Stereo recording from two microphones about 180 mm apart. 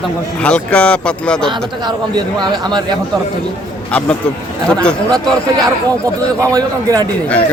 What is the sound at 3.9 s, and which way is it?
Speech, 5° left (ahead or behind).